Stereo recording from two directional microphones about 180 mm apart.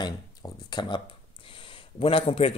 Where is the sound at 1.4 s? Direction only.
30° left (ahead or behind).